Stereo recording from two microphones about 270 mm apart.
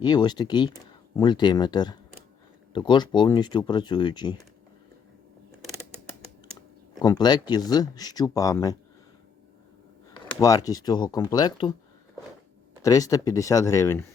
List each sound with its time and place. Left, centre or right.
0.0 s speech: centre
7.0 s speech: centre
10.2 s speech: centre
12.8 s speech: centre